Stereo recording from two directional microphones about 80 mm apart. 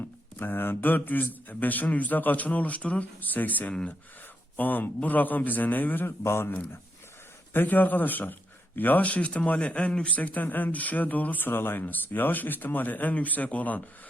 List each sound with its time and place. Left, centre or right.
0.3 s a man's voice: left
7.5 s a man's voice: left